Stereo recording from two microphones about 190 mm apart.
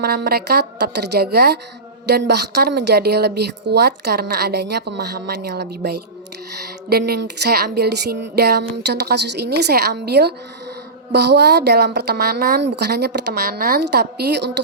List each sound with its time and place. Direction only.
0.0 s a woman's voice: 55° right (ahead or behind)